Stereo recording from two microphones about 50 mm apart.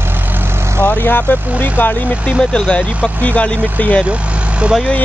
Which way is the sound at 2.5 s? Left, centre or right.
Centre.